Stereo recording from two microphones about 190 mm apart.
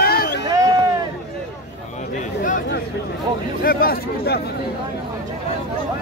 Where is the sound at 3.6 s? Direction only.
50° left (ahead or behind).